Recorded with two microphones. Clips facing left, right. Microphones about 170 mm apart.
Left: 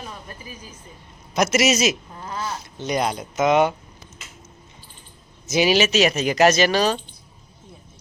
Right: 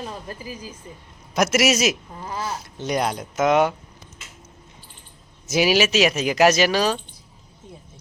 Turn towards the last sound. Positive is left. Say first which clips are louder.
# left 1 dB
turn(degrees=-5)  # may be behind; listen again after turning